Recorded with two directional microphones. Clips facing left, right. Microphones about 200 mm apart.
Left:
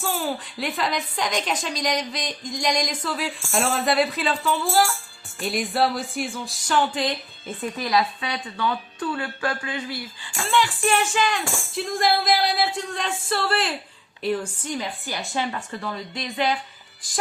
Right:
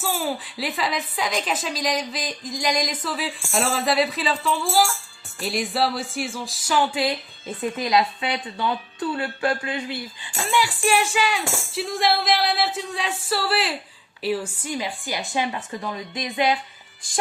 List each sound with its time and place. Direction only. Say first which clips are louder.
0.0 s speech: even; 5° right (ahead or behind)
7.8 s speech: right 1 dB; 25° right (ahead or behind)
10.5 s speech: even; 10° right (ahead or behind)